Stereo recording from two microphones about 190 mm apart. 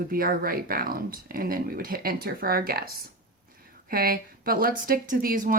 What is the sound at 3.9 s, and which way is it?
Speech, 50° right (ahead or behind).